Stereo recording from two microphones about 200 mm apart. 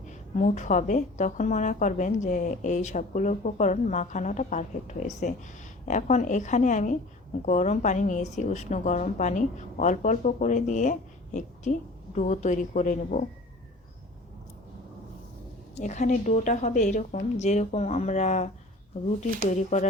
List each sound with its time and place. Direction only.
0.3 s a woman's voice: 35° left (ahead or behind)
15.8 s a woman's voice: 35° left (ahead or behind)
19.5 s a woman's voice: 35° left (ahead or behind)